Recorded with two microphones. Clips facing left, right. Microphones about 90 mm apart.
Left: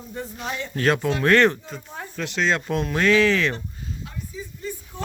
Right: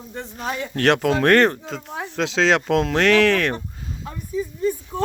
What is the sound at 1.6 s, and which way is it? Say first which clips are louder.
Speech: right 5 dB; 90° right.